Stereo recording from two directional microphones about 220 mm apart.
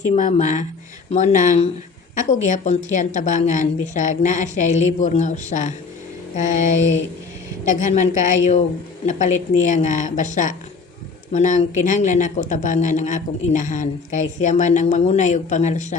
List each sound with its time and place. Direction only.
0.0 s a woman's voice: 35° left (ahead or behind)